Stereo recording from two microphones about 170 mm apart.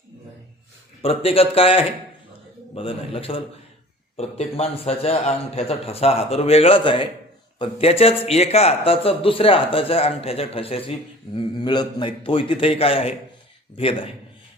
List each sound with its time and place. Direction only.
1.0 s speech: 35° left (ahead or behind)